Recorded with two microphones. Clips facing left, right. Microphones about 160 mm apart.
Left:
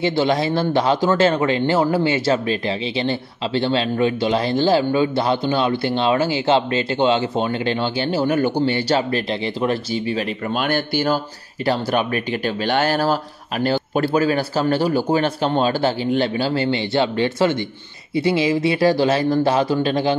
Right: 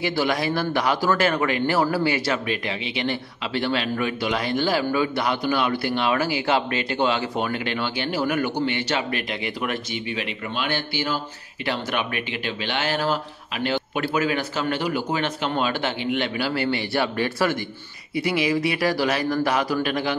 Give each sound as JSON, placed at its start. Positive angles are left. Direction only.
{"t": 0.0, "sound": "speech", "side_deg": 25}